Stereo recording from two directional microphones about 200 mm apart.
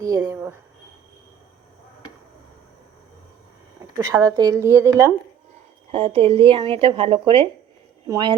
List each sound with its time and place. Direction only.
0.0 s speech: 15° right (ahead or behind)
3.9 s speech: 15° right (ahead or behind)
5.9 s speech: 30° right (ahead or behind)